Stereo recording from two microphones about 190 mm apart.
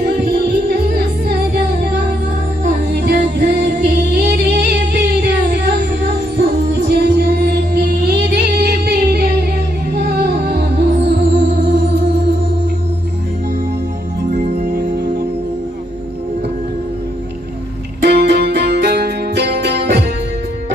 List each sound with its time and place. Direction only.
0.7 s music: 55° right (ahead or behind)
2.6 s music: 45° right (ahead or behind)
14.7 s music: 55° right (ahead or behind)
18.0 s music: 60° right (ahead or behind)